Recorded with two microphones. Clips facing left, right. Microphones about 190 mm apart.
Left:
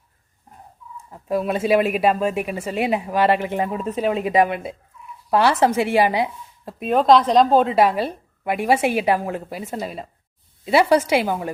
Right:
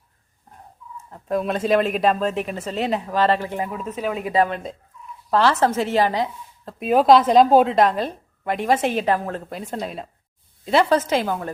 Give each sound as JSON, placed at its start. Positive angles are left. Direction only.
{"t": 1.1, "sound": "speech", "side_deg": 5}
{"t": 6.8, "sound": "a woman's voice", "side_deg": -5}
{"t": 7.8, "sound": "speech", "side_deg": 10}